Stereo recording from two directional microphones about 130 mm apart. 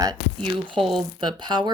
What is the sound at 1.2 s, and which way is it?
Speech, 35° right (ahead or behind).